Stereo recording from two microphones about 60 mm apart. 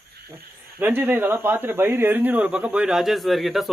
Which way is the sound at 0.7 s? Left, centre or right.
Right.